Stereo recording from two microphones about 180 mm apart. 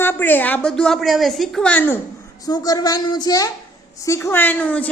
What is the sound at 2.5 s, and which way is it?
A woman's voice, 20° left (ahead or behind).